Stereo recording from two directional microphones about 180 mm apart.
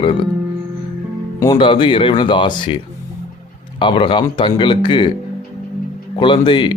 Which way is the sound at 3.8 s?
25° left (ahead or behind).